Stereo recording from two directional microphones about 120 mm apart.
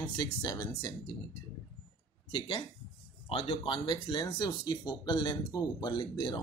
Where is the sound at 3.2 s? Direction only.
50° left (ahead or behind).